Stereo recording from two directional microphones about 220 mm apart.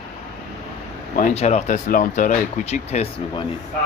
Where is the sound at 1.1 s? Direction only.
35° left (ahead or behind).